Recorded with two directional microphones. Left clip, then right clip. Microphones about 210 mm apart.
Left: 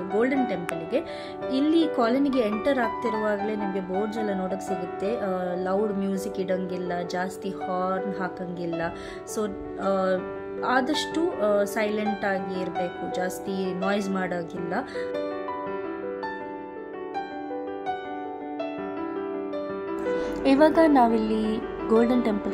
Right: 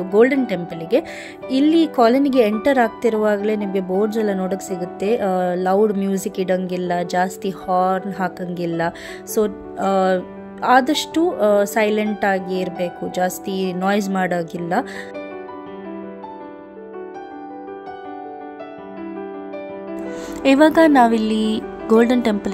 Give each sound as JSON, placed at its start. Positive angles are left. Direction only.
{"t": 0.1, "sound": "speech", "side_deg": -40}
{"t": 20.6, "sound": "speech", "side_deg": -45}